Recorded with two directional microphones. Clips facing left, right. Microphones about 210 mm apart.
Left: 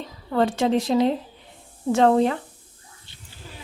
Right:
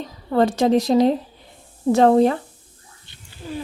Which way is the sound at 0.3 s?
40° right (ahead or behind).